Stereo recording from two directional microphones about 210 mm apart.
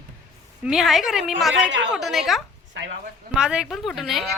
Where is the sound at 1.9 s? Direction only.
Centre (ahead or behind).